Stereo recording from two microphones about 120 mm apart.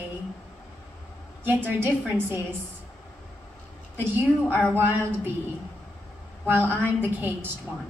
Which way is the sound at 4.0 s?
20° right (ahead or behind).